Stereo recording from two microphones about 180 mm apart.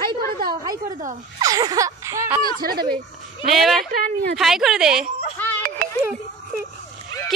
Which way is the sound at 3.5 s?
Centre (ahead or behind).